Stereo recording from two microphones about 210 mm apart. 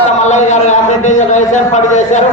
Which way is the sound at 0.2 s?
35° left (ahead or behind).